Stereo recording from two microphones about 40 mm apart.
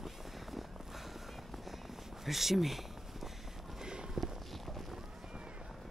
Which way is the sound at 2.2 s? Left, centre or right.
Centre.